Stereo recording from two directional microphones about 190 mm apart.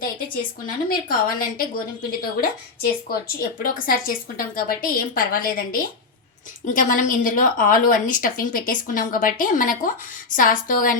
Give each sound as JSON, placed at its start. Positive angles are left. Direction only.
{"t": 0.9, "sound": "a woman's voice", "side_deg": 50}